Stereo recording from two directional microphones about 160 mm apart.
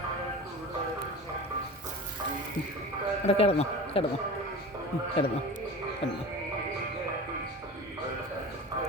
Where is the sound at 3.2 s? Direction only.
40° left (ahead or behind).